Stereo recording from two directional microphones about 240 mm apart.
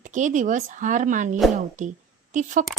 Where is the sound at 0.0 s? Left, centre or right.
Right.